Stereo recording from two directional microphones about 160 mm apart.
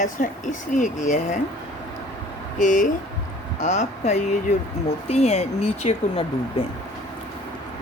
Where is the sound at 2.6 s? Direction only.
55° left (ahead or behind).